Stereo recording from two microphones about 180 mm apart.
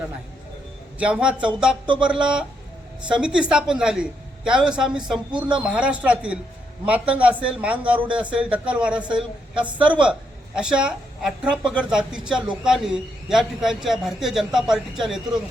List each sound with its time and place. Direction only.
0.9 s a woman's voice: 5° right (ahead or behind)